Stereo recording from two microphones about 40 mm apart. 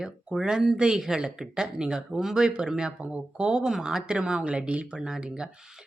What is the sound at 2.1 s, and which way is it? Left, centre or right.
Speech, centre.